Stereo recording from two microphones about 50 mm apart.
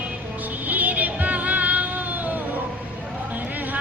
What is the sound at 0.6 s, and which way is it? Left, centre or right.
Child singing, right.